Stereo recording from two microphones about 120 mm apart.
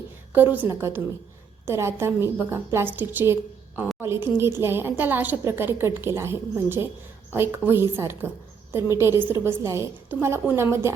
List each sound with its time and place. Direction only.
0.5 s a woman's voice: 20° right (ahead or behind)